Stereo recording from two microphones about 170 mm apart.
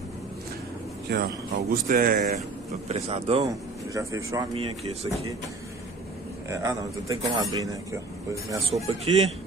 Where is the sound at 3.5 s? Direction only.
20° right (ahead or behind).